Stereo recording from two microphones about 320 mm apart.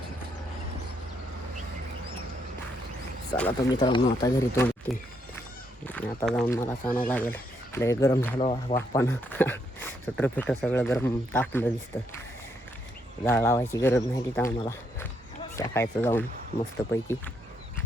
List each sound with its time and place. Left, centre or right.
3.3 s speech: centre
3.8 s speech: centre
5.8 s speech: centre
9.0 s speech: centre
13.2 s speech: centre